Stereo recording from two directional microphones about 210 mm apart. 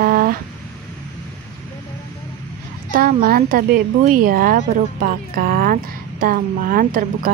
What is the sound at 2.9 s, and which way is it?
A woman's voice, 45° right (ahead or behind).